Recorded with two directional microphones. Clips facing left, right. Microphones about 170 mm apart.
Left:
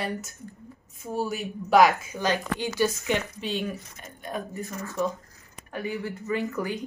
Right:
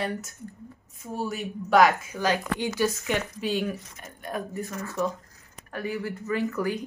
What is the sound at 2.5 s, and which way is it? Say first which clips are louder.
Speech: even; 15° right (ahead or behind).